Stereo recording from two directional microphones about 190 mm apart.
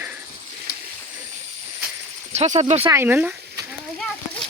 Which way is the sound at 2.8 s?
10° right (ahead or behind).